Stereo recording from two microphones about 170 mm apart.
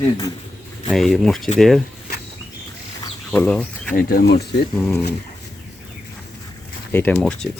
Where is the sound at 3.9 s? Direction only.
60° left (ahead or behind).